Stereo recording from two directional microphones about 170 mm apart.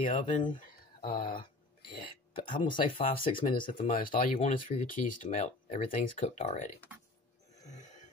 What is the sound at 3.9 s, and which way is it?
Speech, 55° left (ahead or behind).